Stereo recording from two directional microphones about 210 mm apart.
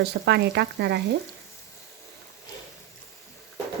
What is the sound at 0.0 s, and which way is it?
Speech, 50° right (ahead or behind).